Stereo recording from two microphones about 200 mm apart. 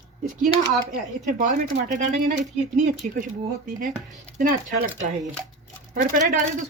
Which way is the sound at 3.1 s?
45° right (ahead or behind).